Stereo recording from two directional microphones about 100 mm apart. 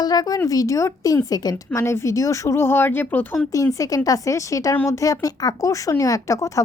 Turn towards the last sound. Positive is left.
turn(degrees=30)  # may be behind; listen again after turning